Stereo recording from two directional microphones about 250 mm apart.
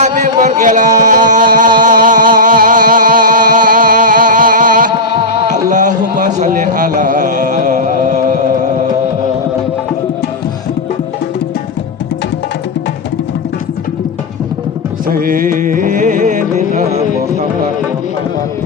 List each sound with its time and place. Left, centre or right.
0.0 s music: right
5.5 s a sound: right
15.0 s music: right